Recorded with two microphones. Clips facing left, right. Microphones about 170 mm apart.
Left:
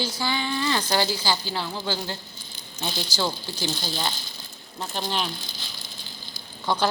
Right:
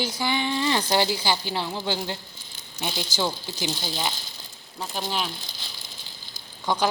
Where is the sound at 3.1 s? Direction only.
15° right (ahead or behind).